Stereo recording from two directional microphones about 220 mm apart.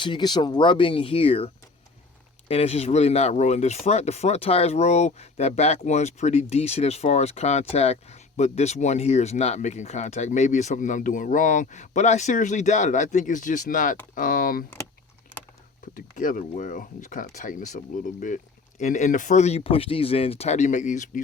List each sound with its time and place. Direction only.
0.0 s speech: 20° left (ahead or behind)
2.5 s speech: 30° left (ahead or behind)
16.0 s speech: 40° left (ahead or behind)